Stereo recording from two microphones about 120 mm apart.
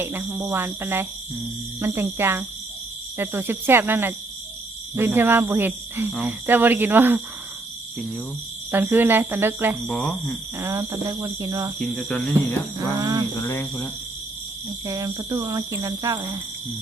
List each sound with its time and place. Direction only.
0.0 s speech: 20° right (ahead or behind)
8.7 s speech: 15° right (ahead or behind)
9.8 s speech: 5° left (ahead or behind)
10.6 s speech: 25° right (ahead or behind)
11.8 s speech: 5° left (ahead or behind)
13.0 s a sound: 30° right (ahead or behind)
13.4 s speech: 20° left (ahead or behind)
14.8 s speech: 30° right (ahead or behind)